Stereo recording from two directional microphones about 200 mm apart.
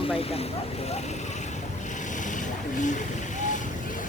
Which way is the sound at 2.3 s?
40° left (ahead or behind).